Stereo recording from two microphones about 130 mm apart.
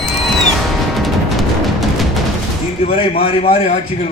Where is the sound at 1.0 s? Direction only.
Centre (ahead or behind).